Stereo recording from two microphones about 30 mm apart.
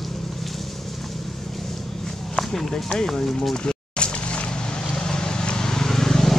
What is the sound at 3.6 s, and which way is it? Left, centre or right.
Vehicle, left.